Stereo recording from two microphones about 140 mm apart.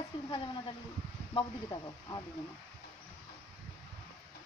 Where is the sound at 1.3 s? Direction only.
30° left (ahead or behind).